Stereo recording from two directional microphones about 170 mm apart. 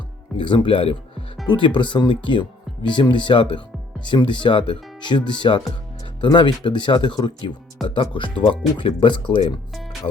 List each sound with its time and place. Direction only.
0.3 s speech: 30° left (ahead or behind)